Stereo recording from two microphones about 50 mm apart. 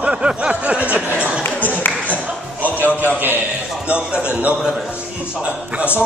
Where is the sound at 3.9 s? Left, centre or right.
Right.